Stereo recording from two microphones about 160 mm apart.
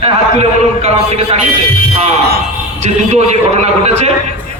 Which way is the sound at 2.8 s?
45° right (ahead or behind).